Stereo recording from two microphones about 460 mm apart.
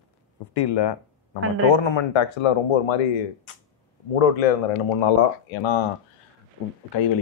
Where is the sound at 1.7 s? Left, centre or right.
Left.